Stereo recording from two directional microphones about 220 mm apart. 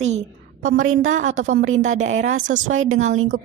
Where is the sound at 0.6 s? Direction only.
35° right (ahead or behind).